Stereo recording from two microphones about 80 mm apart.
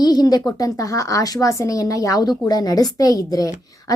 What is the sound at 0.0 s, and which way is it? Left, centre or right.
A woman's voice, left.